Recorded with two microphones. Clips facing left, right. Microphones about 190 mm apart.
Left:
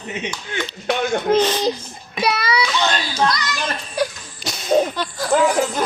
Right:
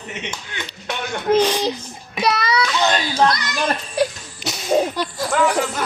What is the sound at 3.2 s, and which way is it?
Speech, 55° right (ahead or behind).